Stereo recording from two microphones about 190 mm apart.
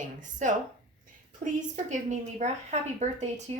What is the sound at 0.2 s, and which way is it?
Speech, 40° right (ahead or behind).